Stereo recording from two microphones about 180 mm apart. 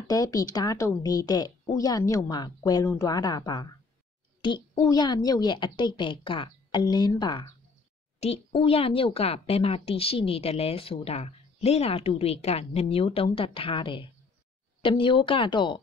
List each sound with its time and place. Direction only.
0.1 s a woman's voice: 20° left (ahead or behind)
8.2 s a woman's voice: 35° left (ahead or behind)